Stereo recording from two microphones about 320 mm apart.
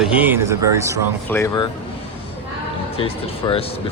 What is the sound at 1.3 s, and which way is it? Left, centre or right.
Speech, centre.